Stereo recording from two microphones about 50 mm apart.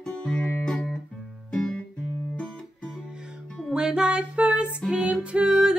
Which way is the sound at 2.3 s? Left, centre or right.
Centre.